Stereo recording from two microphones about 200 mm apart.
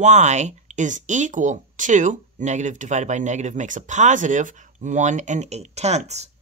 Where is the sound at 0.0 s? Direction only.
35° right (ahead or behind).